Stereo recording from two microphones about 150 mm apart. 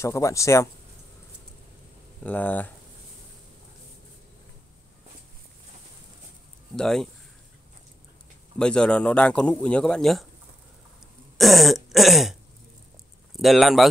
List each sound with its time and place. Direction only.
0.0 s speech: 20° left (ahead or behind)
2.2 s a man's voice: 10° left (ahead or behind)
6.7 s throat clearing: 5° left (ahead or behind)
8.5 s a man's voice: 5° left (ahead or behind)
11.3 s throat clearing: centre (ahead or behind)
13.4 s throat clearing: centre (ahead or behind)